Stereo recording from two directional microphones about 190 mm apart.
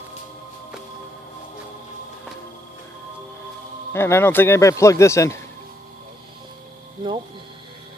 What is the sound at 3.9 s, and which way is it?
A man's voice, 10° left (ahead or behind).